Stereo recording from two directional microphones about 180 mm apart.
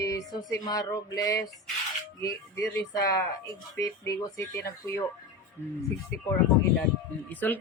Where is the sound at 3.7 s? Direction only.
15° left (ahead or behind).